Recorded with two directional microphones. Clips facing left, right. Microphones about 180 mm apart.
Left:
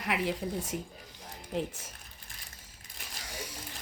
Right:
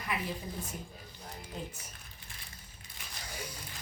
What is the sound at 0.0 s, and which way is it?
Speech, 80° left.